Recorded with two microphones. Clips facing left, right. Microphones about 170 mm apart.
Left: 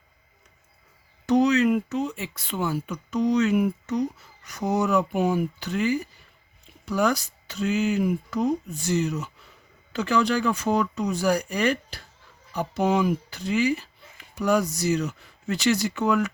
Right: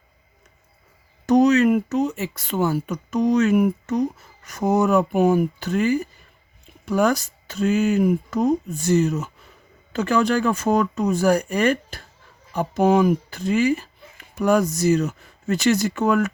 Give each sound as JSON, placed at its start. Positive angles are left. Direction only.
{"t": 1.3, "sound": "speech", "side_deg": -45}